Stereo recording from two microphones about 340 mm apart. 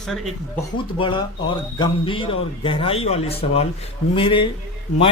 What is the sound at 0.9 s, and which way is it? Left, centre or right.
Speech, centre.